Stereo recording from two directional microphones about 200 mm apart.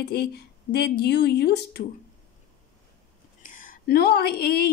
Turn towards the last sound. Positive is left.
turn(degrees=50)  # may be behind; listen again after turning